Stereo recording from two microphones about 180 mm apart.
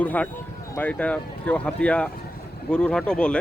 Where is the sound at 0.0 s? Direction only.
10° left (ahead or behind).